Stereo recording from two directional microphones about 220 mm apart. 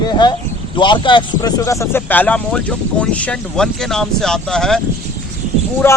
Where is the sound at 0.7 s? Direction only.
20° left (ahead or behind).